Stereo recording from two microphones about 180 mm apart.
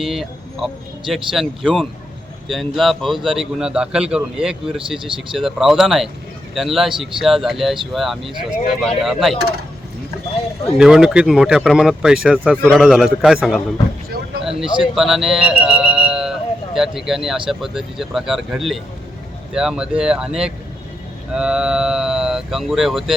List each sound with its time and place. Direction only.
0.0 s speech: centre (ahead or behind)
5.0 s speech: 30° right (ahead or behind)
5.4 s speech: centre (ahead or behind)
10.8 s speech: 5° right (ahead or behind)
15.4 s music: 5° right (ahead or behind)
17.5 s speech: centre (ahead or behind)